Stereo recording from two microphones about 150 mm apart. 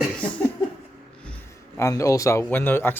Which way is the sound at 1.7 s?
20° left (ahead or behind).